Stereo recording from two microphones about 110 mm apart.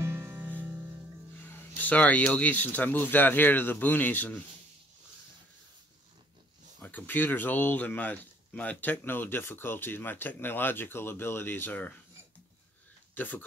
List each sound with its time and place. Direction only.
0.0 s music: 20° right (ahead or behind)
1.8 s speech: 15° left (ahead or behind)
6.8 s speech: 15° left (ahead or behind)
13.1 s speech: 15° left (ahead or behind)